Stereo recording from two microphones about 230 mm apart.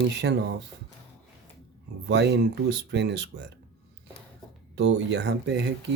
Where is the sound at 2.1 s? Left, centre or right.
Right.